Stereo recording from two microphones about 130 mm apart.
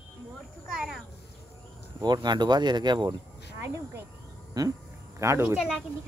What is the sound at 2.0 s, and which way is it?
Speech, 35° right (ahead or behind).